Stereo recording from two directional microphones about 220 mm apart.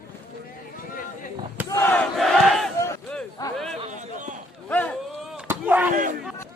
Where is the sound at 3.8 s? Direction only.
35° right (ahead or behind).